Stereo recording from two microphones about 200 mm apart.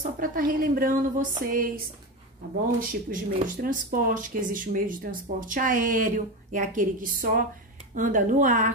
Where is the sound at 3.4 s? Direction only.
45° right (ahead or behind).